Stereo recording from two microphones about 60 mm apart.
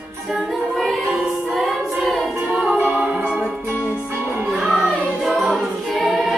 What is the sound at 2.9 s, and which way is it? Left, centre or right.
Music, right.